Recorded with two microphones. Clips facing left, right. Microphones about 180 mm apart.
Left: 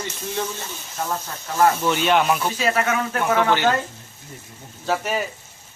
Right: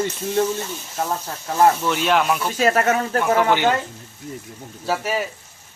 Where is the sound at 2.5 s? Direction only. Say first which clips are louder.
Right 4 dB; 45° right (ahead or behind).